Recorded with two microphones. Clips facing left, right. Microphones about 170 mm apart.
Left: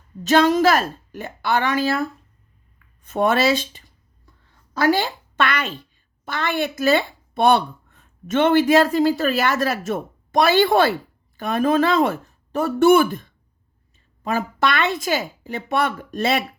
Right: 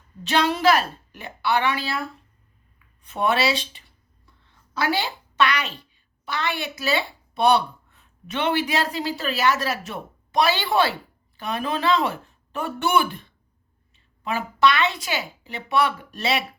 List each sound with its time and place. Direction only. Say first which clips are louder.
0.2 s a woman's voice: left 6 dB; 45° left (ahead or behind)